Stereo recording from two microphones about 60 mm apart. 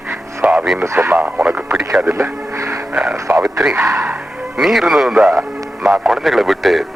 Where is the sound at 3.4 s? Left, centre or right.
Centre.